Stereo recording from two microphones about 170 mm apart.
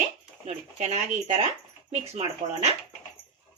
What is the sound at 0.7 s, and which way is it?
Speech, 40° right (ahead or behind).